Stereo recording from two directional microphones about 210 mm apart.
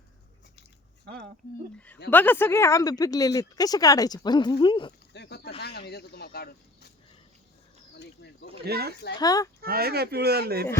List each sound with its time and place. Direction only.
1.0 s speech: 50° right (ahead or behind)
2.0 s speech: 10° left (ahead or behind)
5.1 s speech: 55° left (ahead or behind)
7.9 s speech: 55° left (ahead or behind)
8.6 s speech: 50° right (ahead or behind)
9.1 s speech: 15° left (ahead or behind)
9.6 s speech: 45° right (ahead or behind)